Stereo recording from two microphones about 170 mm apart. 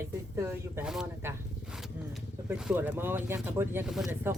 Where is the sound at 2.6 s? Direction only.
5° right (ahead or behind).